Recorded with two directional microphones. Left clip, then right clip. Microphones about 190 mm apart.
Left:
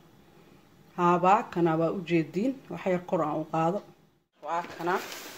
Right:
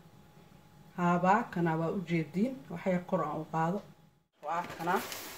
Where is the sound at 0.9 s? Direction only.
40° left (ahead or behind).